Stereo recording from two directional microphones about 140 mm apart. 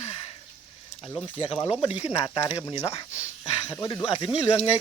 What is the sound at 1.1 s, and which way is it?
Speech, 35° left (ahead or behind).